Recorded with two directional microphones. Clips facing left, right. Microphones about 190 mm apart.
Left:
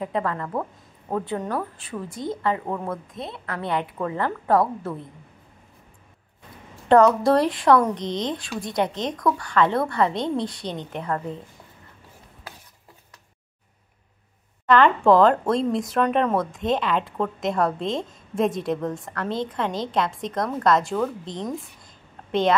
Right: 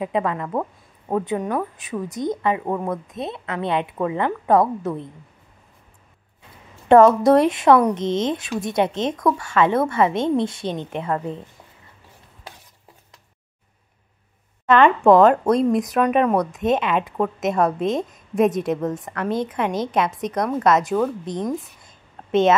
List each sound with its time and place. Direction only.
0.0 s speech: 15° right (ahead or behind)
6.9 s speech: 20° right (ahead or behind)
8.0 s speech: 20° left (ahead or behind)
8.3 s speech: 20° right (ahead or behind)
14.7 s speech: 25° right (ahead or behind)